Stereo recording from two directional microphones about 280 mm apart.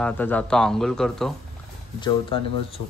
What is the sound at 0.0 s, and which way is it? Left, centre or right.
Speech, centre.